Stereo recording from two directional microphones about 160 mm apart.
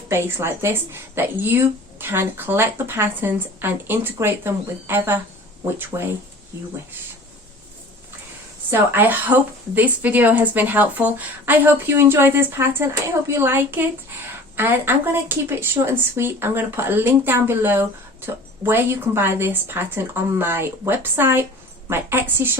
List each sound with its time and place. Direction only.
0.1 s a woman's voice: 15° right (ahead or behind)
8.7 s a woman's voice: 15° right (ahead or behind)